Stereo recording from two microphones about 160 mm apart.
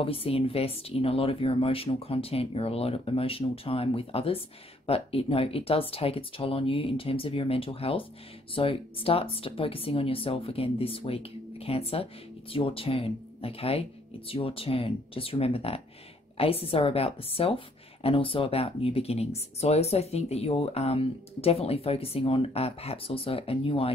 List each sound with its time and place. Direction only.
0.0 s speech: 35° left (ahead or behind)